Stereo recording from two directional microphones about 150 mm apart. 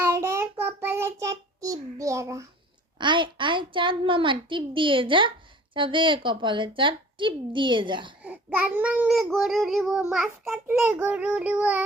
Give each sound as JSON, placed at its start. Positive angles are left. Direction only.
{"t": 0.0, "sound": "child singing", "side_deg": -15}
{"t": 3.0, "sound": "a woman's voice", "side_deg": -30}
{"t": 8.2, "sound": "child singing", "side_deg": -10}